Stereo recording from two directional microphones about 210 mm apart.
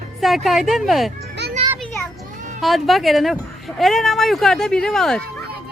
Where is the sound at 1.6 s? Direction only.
30° right (ahead or behind).